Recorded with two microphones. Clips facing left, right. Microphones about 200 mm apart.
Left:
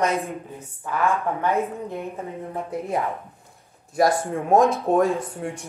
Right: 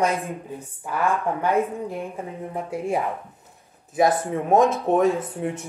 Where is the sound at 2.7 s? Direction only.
10° right (ahead or behind).